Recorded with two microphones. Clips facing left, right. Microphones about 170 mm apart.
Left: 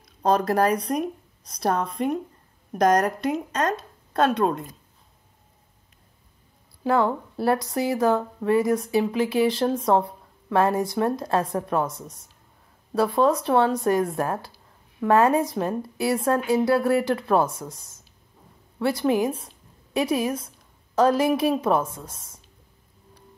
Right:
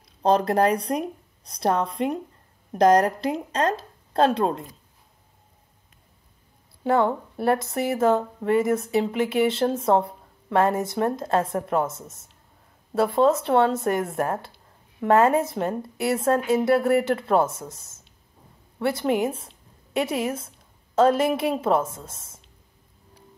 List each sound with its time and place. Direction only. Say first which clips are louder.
0.2 s speech: right 1 dB; 25° right (ahead or behind)
6.8 s a woman's voice: right 1 dB; 20° right (ahead or behind)